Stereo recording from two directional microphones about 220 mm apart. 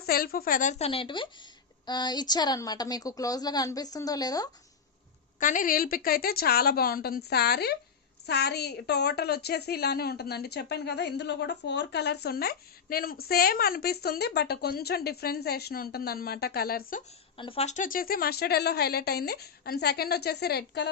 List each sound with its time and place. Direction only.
0.0 s a woman's voice: 45° left (ahead or behind); by 4.4 s 15° left (ahead or behind)
5.4 s a woman's voice: 35° left (ahead or behind)
17.3 s a woman's voice: 25° left (ahead or behind); by 20.9 s 50° left (ahead or behind)